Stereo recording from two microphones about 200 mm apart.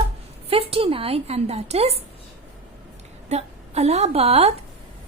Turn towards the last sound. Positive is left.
turn(degrees=-30)  # may be behind; listen again after turning